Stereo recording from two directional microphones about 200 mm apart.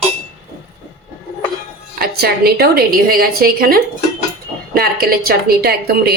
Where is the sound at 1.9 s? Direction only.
50° right (ahead or behind).